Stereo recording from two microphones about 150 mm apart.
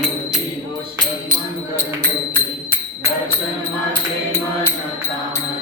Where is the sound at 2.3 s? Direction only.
15° left (ahead or behind).